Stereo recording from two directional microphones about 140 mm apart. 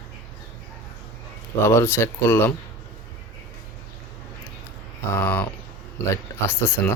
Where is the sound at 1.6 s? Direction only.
15° left (ahead or behind).